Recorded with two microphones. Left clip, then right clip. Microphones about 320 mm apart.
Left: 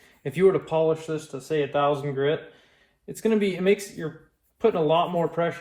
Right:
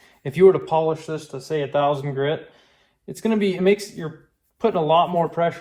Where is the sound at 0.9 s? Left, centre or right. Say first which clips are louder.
Right 1 dB; centre.